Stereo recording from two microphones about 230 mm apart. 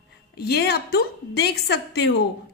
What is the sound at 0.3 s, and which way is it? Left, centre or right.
A woman's voice, left.